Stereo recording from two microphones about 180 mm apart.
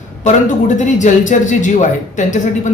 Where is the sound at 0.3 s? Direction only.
45° left (ahead or behind).